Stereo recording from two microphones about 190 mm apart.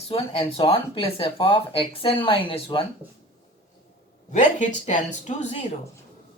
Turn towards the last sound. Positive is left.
turn(degrees=40)  # may be behind; listen again after turning